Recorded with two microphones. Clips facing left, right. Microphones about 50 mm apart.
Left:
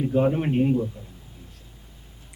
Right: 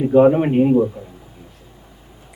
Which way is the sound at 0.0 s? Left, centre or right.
Right.